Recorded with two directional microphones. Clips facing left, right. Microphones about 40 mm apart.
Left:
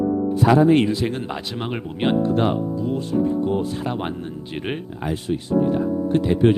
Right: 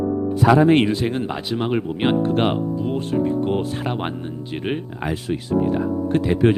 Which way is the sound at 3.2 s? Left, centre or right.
Right.